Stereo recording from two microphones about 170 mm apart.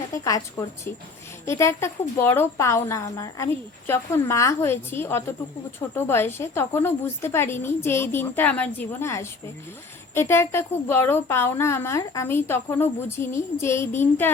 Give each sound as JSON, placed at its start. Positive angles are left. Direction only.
{"t": 0.1, "sound": "a woman's voice", "side_deg": 20}
{"t": 1.5, "sound": "a woman's voice", "side_deg": 15}